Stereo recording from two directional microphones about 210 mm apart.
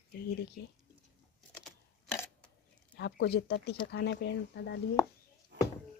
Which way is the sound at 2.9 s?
55° left (ahead or behind).